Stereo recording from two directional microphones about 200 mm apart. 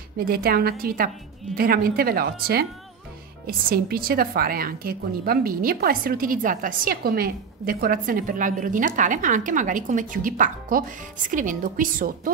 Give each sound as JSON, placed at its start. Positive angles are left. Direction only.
{"t": 0.2, "sound": "a woman's voice", "side_deg": -50}